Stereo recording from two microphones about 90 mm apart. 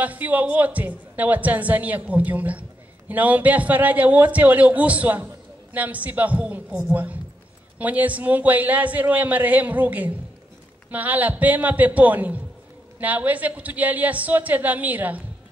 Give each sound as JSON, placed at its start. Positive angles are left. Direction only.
{"t": 0.0, "sound": "a man's voice", "side_deg": -15}